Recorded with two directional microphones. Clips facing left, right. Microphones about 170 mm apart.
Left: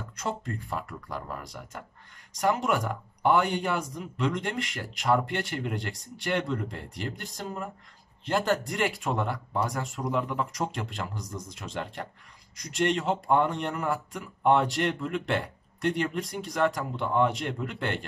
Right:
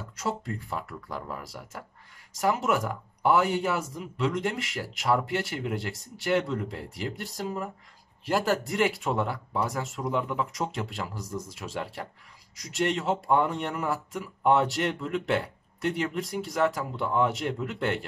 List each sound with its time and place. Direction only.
0.1 s speech: 5° right (ahead or behind)